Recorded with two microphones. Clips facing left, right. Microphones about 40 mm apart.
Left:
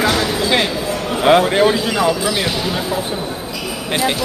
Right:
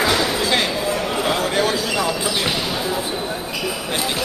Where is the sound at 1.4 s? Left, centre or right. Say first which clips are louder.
Left 5 dB; left.